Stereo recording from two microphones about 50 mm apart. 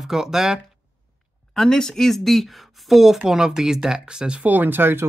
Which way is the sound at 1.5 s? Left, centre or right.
Centre.